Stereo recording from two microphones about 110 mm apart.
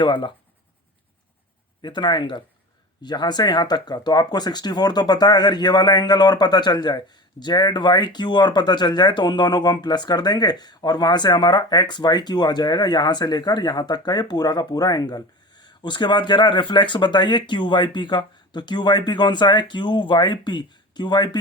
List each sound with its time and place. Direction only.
0.0 s speech: 45° left (ahead or behind)
1.8 s speech: 45° left (ahead or behind)